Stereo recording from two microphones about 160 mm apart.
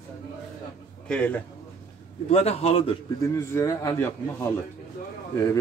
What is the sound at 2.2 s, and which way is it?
Speech, 40° left (ahead or behind).